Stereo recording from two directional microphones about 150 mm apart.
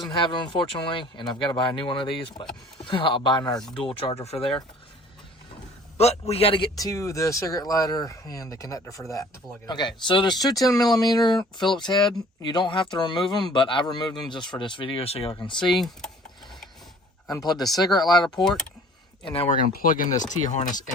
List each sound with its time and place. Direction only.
0.1 s speech: 30° left (ahead or behind)
3.8 s speech: 40° left (ahead or behind)
6.0 s a man's voice: 45° left (ahead or behind)
6.7 s speech: 20° left (ahead or behind)
15.5 s speech: centre (ahead or behind)
17.3 s speech: 25° left (ahead or behind)
18.4 s speech: 5° left (ahead or behind)
19.2 s speech: 40° left (ahead or behind)
19.5 s speech: 65° left (ahead or behind)